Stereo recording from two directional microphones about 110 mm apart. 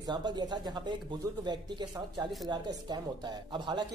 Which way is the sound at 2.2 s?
40° right (ahead or behind).